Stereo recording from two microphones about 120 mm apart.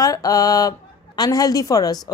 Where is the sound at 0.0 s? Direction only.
30° left (ahead or behind).